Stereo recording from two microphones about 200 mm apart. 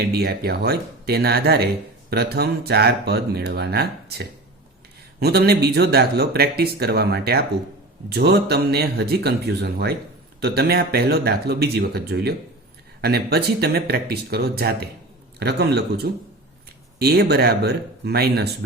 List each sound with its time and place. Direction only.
0.0 s a man's voice: 50° right (ahead or behind)